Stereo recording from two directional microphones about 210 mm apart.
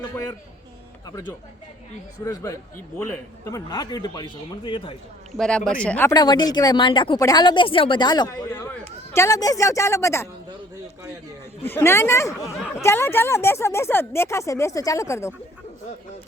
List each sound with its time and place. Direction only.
0.0 s speech: 15° left (ahead or behind)
2.2 s speech: 15° left (ahead or behind)
5.3 s speech: 5° left (ahead or behind)
6.1 s speech: 20° left (ahead or behind)
11.6 s speech: 10° left (ahead or behind)